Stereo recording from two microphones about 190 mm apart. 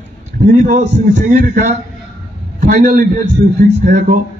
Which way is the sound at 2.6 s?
45° right (ahead or behind).